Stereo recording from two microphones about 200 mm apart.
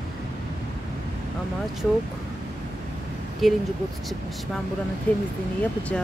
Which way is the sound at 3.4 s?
Centre (ahead or behind).